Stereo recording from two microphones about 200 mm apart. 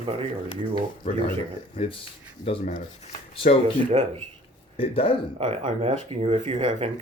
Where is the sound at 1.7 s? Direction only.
25° left (ahead or behind).